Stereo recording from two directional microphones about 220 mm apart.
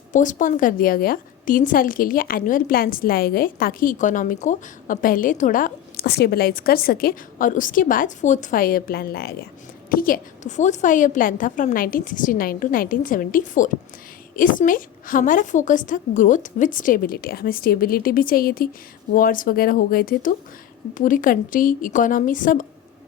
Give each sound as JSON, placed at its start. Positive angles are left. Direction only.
{"t": 0.1, "sound": "a woman's voice", "side_deg": 35}